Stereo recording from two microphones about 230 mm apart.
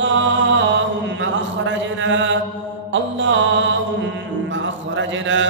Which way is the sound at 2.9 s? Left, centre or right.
Right.